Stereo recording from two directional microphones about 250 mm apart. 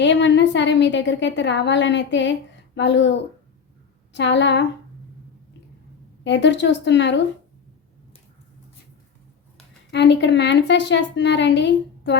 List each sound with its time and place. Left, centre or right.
0.0 s a woman's voice: left
6.2 s a woman's voice: left
9.9 s a woman's voice: left